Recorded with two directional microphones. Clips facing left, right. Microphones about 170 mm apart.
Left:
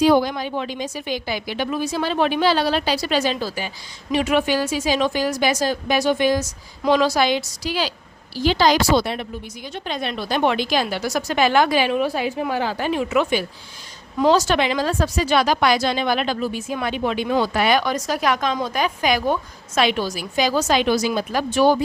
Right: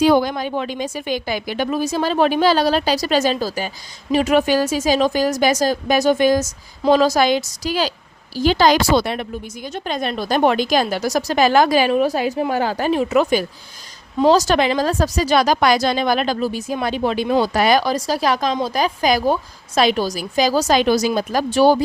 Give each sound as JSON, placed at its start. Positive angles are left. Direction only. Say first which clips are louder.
{"t": 0.0, "sound": "a woman's voice", "louder": "right 1 dB", "side_deg": -55}
{"t": 9.6, "sound": "speech", "louder": "right 3 dB", "side_deg": -45}